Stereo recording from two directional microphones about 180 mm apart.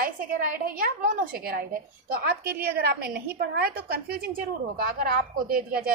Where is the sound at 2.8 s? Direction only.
55° right (ahead or behind).